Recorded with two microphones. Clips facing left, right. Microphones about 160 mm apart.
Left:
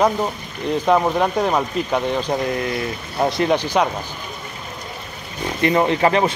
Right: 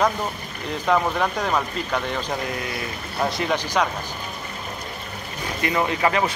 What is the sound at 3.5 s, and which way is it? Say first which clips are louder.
Speech: left 4 dB; 15° left (ahead or behind).